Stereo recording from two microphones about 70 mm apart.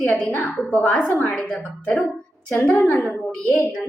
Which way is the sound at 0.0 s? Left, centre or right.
Centre.